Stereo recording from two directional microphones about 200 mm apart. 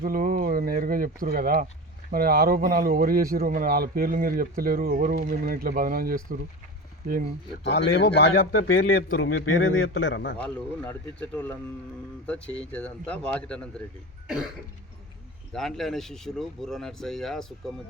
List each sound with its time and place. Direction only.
0.0 s a man's voice: 45° right (ahead or behind)
7.7 s a man's voice: 55° left (ahead or behind)
9.6 s a man's voice: 70° left (ahead or behind)
10.4 s speech: 5° left (ahead or behind)
15.5 s speech: centre (ahead or behind)